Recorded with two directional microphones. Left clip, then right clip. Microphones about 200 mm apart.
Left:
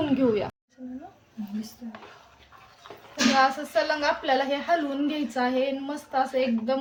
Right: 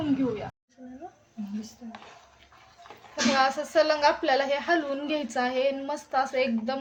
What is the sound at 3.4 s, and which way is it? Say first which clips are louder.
A woman's voice: even; 45° right (ahead or behind).